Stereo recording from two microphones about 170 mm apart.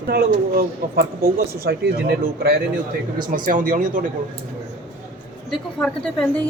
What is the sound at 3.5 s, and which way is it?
Speech, 50° right (ahead or behind).